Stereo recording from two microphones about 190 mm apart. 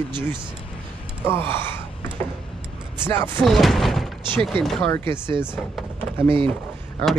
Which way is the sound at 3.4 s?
Centre (ahead or behind).